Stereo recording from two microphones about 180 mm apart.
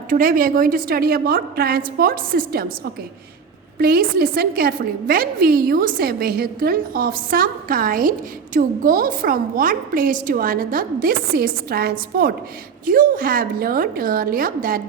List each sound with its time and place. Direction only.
0.1 s a woman's voice: 50° right (ahead or behind)
3.8 s a woman's voice: 60° right (ahead or behind)